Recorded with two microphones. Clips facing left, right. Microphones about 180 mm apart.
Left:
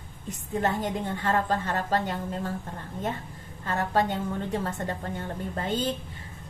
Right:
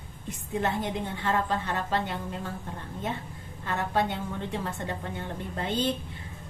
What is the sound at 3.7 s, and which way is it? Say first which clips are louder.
A woman's voice: left 2 dB; 45° left (ahead or behind).